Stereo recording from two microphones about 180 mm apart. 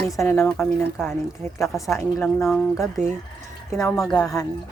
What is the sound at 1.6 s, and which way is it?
Speech, centre (ahead or behind).